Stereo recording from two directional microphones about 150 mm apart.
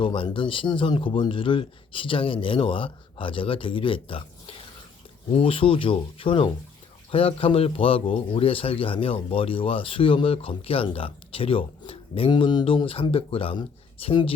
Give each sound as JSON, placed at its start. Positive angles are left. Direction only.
{"t": 0.0, "sound": "a man's voice", "side_deg": 35}